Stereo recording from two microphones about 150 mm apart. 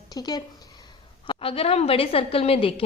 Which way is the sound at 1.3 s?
40° left (ahead or behind).